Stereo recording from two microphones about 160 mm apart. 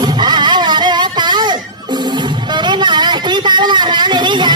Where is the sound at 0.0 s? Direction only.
25° right (ahead or behind).